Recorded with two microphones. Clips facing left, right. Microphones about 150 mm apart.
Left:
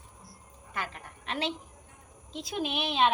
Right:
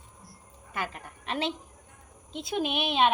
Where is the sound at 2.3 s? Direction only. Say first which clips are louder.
Right 3 dB; centre (ahead or behind).